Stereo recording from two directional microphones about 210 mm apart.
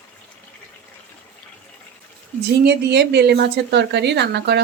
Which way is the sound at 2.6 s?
55° right (ahead or behind).